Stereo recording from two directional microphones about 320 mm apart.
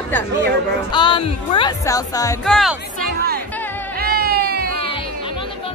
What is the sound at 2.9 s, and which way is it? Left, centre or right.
Chatter, right.